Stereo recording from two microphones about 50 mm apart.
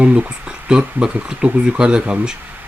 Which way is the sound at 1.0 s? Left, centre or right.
Centre.